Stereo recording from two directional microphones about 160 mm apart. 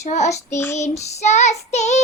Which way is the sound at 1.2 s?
45° left (ahead or behind).